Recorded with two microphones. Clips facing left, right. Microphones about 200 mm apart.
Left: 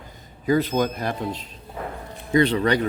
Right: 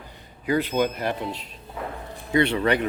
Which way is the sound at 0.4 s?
40° left (ahead or behind).